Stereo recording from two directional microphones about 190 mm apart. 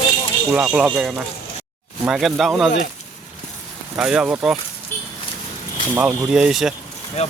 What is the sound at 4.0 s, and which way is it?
Speech, 5° right (ahead or behind).